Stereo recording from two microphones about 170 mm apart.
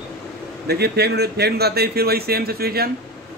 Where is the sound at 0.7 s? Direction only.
70° right (ahead or behind).